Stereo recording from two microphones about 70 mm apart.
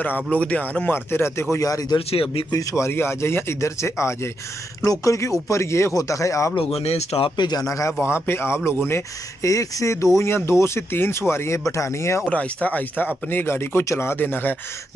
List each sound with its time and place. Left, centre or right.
0.0 s speech: left
0.9 s speech: left
1.6 s speech: left
2.5 s speech: left
7.3 s speech: left
7.6 s speech: left
8.1 s speech: left
9.4 s speech: left
10.1 s speech: left
12.3 s speech: centre